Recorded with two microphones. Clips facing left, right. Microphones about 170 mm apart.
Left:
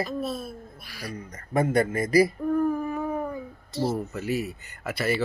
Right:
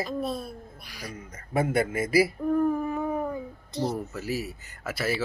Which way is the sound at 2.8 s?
20° right (ahead or behind).